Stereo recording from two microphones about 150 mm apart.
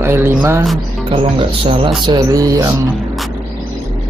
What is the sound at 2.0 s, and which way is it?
Mantra, 25° right (ahead or behind).